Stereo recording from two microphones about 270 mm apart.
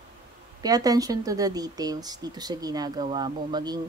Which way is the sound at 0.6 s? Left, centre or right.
Centre.